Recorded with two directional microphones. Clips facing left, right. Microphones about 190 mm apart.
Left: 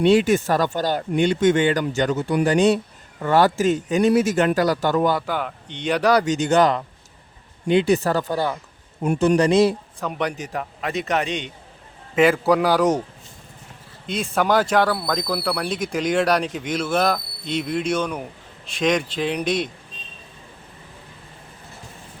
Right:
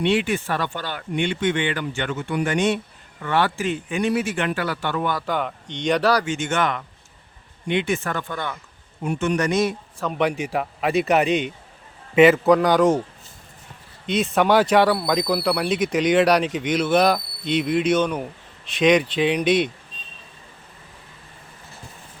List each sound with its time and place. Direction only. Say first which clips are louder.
0.0 s speech: left 5 dB; 40° left (ahead or behind)
5.2 s a man's voice: right 1 dB; 5° left (ahead or behind)
6.2 s speech: left 6 dB; 40° left (ahead or behind)
10.0 s a man's voice: right 1 dB; 10° left (ahead or behind)
10.5 s a man's voice: right 5 dB; 10° right (ahead or behind)
12.5 s a man's voice: right 2 dB; 5° left (ahead or behind)
14.1 s speech: right 2 dB; centre (ahead or behind)